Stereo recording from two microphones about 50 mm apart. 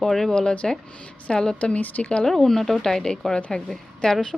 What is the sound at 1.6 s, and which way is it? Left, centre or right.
Speech, left.